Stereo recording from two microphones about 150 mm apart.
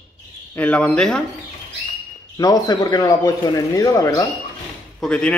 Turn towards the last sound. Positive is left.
turn(degrees=5)  # may be behind; listen again after turning